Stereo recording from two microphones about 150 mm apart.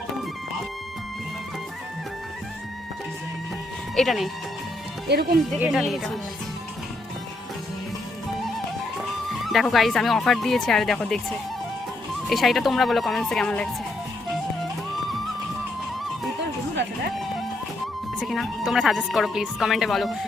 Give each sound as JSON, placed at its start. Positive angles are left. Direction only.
{"t": 3.9, "sound": "speech", "side_deg": 0}
{"t": 5.1, "sound": "speech", "side_deg": -90}
{"t": 5.5, "sound": "speech", "side_deg": -5}
{"t": 9.4, "sound": "speech", "side_deg": 0}
{"t": 18.2, "sound": "speech", "side_deg": 0}